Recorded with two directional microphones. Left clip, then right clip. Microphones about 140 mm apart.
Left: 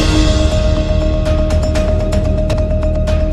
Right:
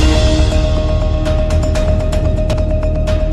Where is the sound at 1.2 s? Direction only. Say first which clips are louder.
Left 1 dB; centre (ahead or behind).